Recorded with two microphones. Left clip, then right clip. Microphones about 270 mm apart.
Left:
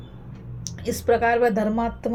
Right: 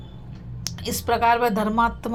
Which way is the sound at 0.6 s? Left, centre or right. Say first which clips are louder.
Left 3 dB; right.